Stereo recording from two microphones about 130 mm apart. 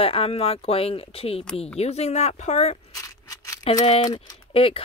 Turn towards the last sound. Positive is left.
turn(degrees=45)  # may be behind; listen again after turning